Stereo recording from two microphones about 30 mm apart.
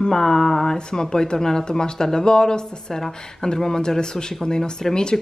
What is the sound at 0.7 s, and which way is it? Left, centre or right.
Speech, left.